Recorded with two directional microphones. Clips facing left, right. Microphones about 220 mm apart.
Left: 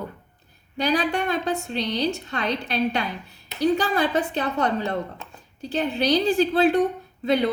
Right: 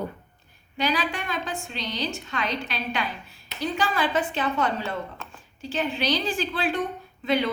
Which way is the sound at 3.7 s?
40° left (ahead or behind).